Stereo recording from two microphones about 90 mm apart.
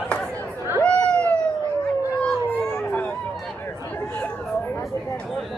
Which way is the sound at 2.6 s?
15° left (ahead or behind).